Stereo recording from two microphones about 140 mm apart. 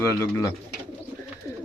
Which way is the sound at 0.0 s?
20° left (ahead or behind).